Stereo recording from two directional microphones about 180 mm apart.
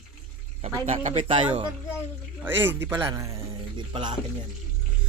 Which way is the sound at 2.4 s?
10° right (ahead or behind).